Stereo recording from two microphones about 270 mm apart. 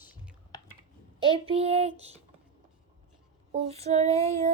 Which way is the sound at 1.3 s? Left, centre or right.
Right.